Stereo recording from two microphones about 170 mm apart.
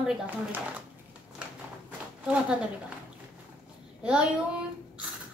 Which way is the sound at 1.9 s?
5° right (ahead or behind).